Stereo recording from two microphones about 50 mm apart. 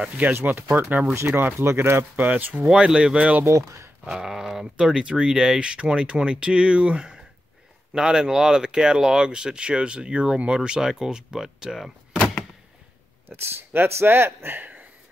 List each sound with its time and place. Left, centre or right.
0.2 s speech: right
1.0 s speech: right
2.2 s speech: right
2.6 s speech: centre
3.4 s speech: right
4.0 s speech: centre
13.3 s speech: right